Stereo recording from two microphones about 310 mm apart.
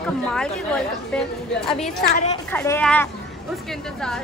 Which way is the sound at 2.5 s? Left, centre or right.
Centre.